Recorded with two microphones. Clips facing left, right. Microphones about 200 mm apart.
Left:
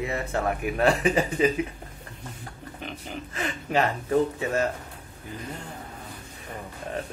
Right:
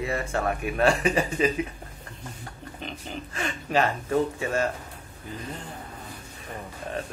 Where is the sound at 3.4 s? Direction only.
20° left (ahead or behind).